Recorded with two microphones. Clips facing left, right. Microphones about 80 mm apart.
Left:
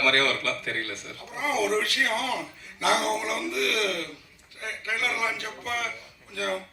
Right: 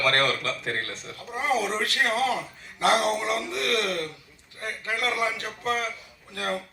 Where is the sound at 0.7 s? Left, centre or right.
Right.